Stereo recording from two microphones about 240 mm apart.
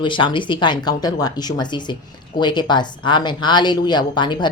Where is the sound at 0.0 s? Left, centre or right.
Centre.